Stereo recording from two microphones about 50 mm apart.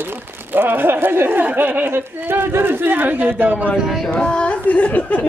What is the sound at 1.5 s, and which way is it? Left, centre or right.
Speech, right.